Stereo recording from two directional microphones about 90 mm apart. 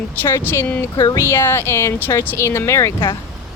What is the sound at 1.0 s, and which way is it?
Speech, 40° left (ahead or behind).